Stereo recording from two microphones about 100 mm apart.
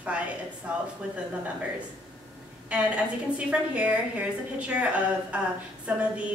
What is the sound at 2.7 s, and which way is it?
A woman's voice, 10° right (ahead or behind).